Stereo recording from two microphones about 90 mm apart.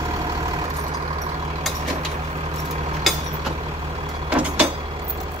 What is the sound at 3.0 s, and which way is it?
Vehicle, centre (ahead or behind).